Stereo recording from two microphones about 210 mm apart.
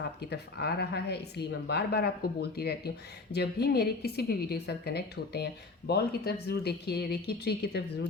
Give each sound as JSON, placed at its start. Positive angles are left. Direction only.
{"t": 0.2, "sound": "speech", "side_deg": 50}